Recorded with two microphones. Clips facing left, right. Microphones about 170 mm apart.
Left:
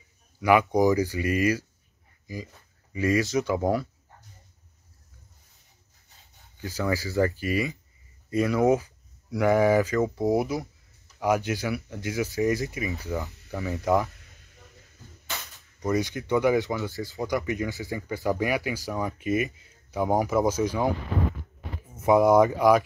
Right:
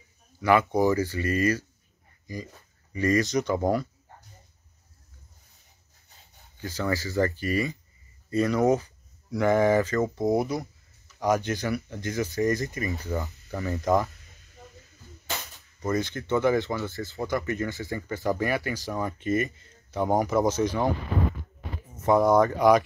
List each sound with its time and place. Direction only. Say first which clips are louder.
0.4 s speech: left 1 dB; 10° left (ahead or behind)
6.6 s speech: left 1 dB; 15° left (ahead or behind)
15.8 s speech: left 1 dB; 15° left (ahead or behind)
21.9 s speech: left 2 dB; 10° left (ahead or behind)